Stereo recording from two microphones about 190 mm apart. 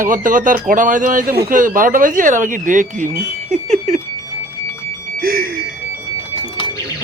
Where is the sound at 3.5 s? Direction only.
40° right (ahead or behind).